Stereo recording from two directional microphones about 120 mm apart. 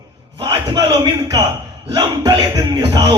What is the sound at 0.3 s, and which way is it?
A man's voice, 35° right (ahead or behind).